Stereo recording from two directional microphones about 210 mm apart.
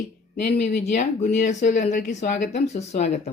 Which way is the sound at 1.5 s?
35° left (ahead or behind).